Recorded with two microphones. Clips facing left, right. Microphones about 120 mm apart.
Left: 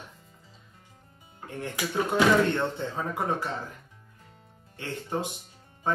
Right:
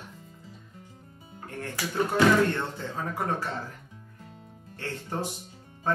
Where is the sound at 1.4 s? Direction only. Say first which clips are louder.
Left 1 dB; 20° left (ahead or behind).